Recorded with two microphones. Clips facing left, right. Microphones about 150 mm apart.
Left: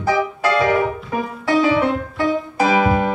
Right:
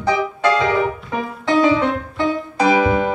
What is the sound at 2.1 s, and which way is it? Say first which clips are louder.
Music: even; 20° right (ahead or behind).